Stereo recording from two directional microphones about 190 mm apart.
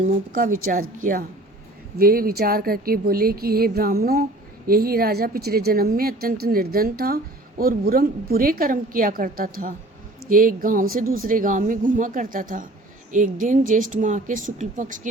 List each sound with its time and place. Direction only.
0.0 s speech: 45° right (ahead or behind)
2.0 s speech: 50° right (ahead or behind)